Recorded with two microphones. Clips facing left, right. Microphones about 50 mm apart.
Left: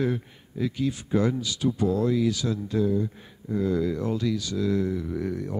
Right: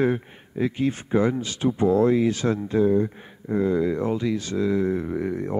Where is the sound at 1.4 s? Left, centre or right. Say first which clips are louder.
Right 3 dB; right.